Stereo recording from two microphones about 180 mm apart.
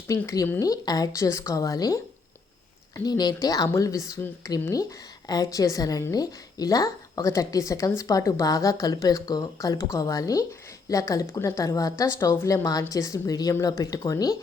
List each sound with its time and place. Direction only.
0.1 s speech: 20° left (ahead or behind)